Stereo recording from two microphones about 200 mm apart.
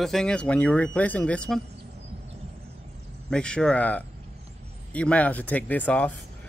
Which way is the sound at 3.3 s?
5° left (ahead or behind).